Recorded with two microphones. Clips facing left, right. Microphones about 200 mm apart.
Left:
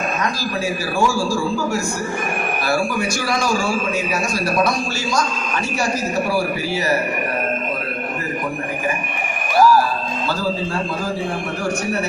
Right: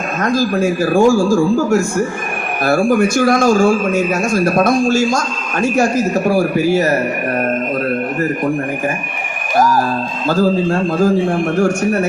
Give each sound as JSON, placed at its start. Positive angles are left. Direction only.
{"t": 0.2, "sound": "a man's voice", "side_deg": -50}
{"t": 9.6, "sound": "music", "side_deg": -45}
{"t": 10.2, "sound": "a man's voice", "side_deg": -50}